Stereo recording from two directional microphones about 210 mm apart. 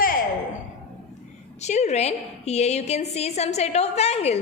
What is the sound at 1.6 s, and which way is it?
A woman's voice, 30° left (ahead or behind).